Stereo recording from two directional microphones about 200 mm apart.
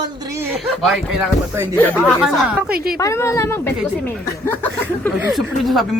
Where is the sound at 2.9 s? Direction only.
15° left (ahead or behind).